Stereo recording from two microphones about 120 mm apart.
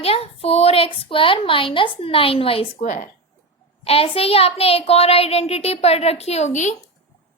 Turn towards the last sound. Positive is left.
turn(degrees=80)